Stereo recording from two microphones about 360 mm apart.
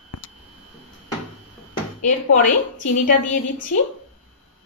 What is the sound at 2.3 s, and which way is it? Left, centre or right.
A woman's voice, left.